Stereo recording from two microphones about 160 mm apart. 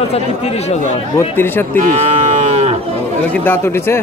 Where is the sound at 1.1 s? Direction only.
15° left (ahead or behind).